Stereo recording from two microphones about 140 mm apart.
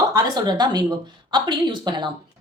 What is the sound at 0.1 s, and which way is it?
A woman's voice, 30° right (ahead or behind).